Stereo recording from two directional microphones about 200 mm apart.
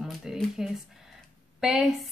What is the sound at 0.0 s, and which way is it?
Speech, centre (ahead or behind).